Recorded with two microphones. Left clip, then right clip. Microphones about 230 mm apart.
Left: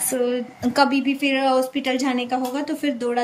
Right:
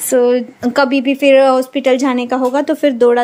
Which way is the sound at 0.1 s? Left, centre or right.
Centre.